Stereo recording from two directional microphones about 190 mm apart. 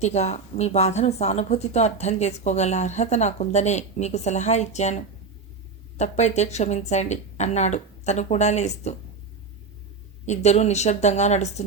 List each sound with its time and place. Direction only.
0.0 s a woman's voice: 35° left (ahead or behind)
10.2 s a woman's voice: 35° left (ahead or behind)